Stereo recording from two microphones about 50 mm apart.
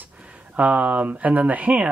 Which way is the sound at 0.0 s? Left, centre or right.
Right.